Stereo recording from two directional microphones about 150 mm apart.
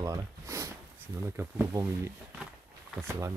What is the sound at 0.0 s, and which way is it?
Speech, 20° right (ahead or behind).